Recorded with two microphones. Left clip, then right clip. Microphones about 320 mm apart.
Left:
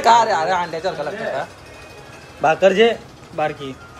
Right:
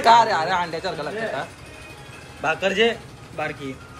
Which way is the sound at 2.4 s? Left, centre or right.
Left.